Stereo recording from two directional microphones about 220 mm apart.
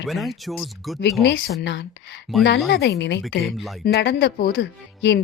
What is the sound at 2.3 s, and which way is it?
Speech, centre (ahead or behind).